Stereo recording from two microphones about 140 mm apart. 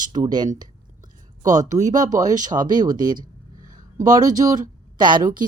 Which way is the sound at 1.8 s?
65° right (ahead or behind).